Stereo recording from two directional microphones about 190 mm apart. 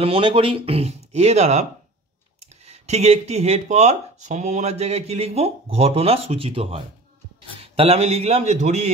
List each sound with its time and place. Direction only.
0.0 s speech: 30° right (ahead or behind)